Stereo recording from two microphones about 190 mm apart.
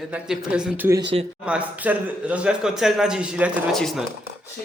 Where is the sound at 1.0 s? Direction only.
25° right (ahead or behind).